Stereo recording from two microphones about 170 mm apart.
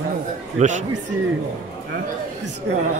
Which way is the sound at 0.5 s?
45° right (ahead or behind).